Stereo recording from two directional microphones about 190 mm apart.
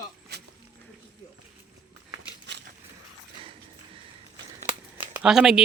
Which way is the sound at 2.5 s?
65° right (ahead or behind).